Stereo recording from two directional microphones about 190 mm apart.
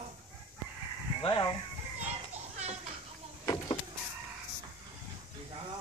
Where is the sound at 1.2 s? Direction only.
25° left (ahead or behind).